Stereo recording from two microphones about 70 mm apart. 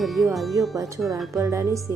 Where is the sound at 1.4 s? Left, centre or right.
Right.